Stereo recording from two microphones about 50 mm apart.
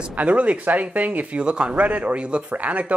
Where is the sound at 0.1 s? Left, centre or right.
Right.